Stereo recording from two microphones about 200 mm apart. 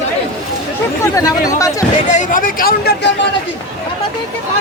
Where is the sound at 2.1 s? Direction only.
40° left (ahead or behind).